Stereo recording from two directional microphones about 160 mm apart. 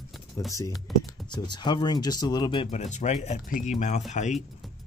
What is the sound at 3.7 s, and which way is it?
Speech, 45° left (ahead or behind).